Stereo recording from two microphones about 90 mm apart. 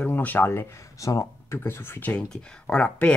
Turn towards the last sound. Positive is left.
turn(degrees=10)  # may be behind; listen again after turning